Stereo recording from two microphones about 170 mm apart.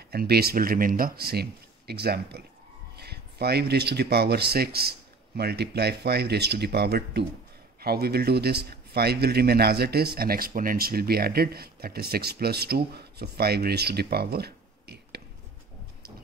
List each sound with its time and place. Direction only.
0.1 s speech: 65° right (ahead or behind)